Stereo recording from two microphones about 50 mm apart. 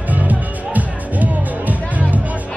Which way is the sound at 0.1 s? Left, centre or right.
Right.